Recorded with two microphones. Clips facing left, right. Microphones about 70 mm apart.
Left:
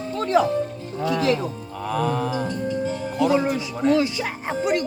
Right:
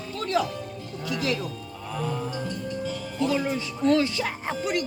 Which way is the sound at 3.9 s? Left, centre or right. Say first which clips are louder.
Left 2 dB; centre.